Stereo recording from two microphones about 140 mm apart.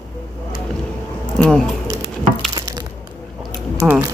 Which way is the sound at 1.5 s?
Centre (ahead or behind).